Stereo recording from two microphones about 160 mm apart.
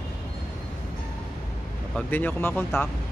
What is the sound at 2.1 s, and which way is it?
Speech, 10° left (ahead or behind).